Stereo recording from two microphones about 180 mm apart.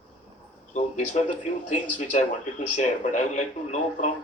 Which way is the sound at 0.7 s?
40° left (ahead or behind).